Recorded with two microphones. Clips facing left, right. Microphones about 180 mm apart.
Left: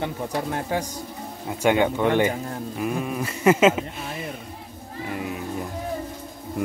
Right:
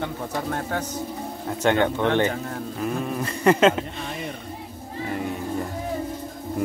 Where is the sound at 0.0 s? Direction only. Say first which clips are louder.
Left 1 dB; 10° left (ahead or behind).